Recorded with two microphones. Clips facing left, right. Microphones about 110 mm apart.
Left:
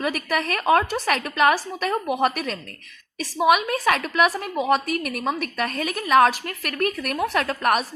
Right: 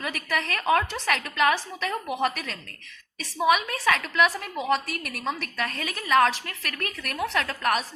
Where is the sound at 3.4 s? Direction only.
20° left (ahead or behind).